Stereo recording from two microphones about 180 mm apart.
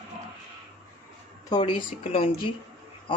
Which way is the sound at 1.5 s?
25° left (ahead or behind).